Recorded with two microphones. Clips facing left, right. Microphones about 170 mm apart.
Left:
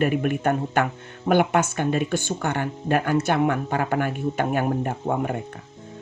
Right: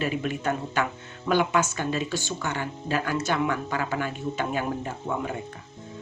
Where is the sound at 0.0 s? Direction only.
55° left (ahead or behind).